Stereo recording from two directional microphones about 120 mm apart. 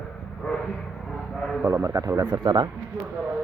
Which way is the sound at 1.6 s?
25° right (ahead or behind).